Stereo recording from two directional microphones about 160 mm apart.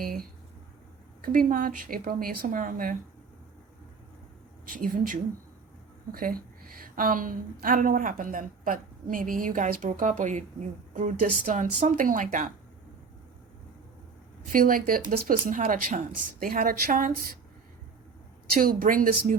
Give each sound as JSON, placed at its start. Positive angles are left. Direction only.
{"t": 0.0, "sound": "a woman's voice", "side_deg": -65}
{"t": 4.7, "sound": "a woman's voice", "side_deg": -60}
{"t": 14.4, "sound": "a woman's voice", "side_deg": -60}
{"t": 18.6, "sound": "a woman's voice", "side_deg": -60}